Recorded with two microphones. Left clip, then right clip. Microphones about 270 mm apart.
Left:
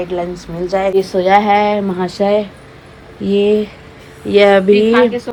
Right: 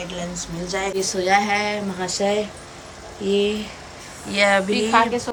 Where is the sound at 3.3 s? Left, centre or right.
Centre.